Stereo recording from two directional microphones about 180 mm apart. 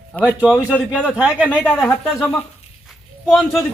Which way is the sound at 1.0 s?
5° right (ahead or behind).